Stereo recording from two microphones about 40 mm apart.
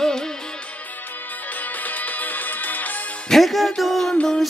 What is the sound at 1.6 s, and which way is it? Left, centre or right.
Music, left.